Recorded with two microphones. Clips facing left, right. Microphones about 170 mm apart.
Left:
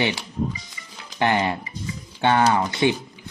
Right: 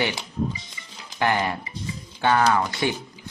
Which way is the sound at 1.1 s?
25° left (ahead or behind).